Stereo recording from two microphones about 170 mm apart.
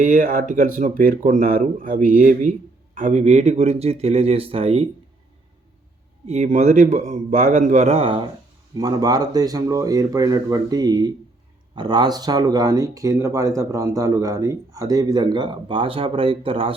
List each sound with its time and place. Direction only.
0.0 s speech: 50° right (ahead or behind); by 4.9 s 35° right (ahead or behind)
6.2 s speech: 40° right (ahead or behind)